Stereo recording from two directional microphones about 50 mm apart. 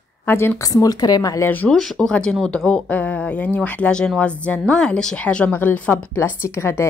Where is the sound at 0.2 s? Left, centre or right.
Left.